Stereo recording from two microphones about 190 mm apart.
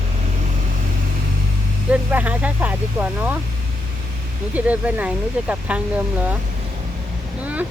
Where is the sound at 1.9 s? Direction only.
10° right (ahead or behind).